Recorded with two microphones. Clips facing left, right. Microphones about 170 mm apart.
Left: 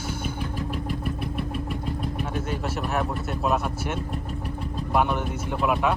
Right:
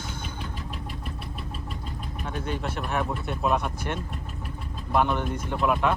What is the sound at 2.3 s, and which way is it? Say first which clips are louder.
Speech: left 2 dB; 5° left (ahead or behind).